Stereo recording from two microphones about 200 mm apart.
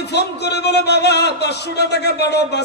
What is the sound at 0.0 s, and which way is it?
Speech, 55° left (ahead or behind).